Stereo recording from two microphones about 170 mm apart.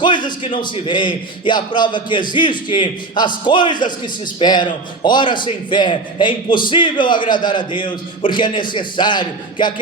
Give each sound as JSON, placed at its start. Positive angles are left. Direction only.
{"t": 0.0, "sound": "a man's voice", "side_deg": 25}